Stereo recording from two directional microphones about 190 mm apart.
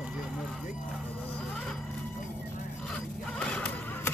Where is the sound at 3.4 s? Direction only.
5° left (ahead or behind).